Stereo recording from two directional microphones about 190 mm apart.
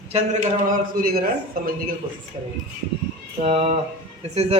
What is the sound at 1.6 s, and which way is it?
Speech, 50° right (ahead or behind).